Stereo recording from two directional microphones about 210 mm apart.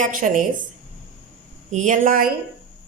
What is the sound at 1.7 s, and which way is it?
Speech, 35° right (ahead or behind).